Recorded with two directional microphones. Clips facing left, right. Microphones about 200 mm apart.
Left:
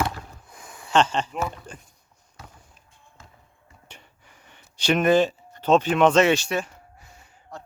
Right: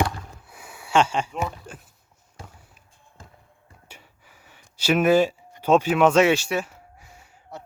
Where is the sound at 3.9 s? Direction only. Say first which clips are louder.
Even; 5° right (ahead or behind).